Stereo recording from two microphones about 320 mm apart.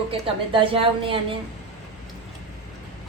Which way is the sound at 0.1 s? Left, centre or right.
Centre.